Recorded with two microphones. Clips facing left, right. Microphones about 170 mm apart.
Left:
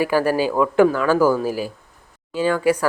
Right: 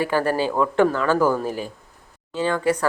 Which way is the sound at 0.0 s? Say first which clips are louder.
Left 3 dB; 10° left (ahead or behind).